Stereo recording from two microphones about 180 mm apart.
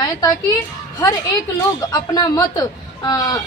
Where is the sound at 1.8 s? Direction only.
20° left (ahead or behind).